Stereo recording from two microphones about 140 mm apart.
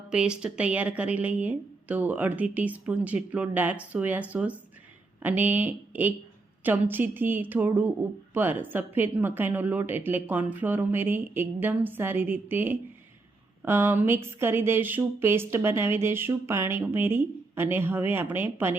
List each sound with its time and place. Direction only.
0.1 s speech: 5° right (ahead or behind)